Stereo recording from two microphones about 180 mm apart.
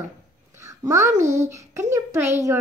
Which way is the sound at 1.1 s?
40° right (ahead or behind).